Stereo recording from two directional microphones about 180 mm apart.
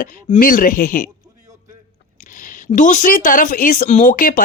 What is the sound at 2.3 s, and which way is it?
Speech, 45° left (ahead or behind).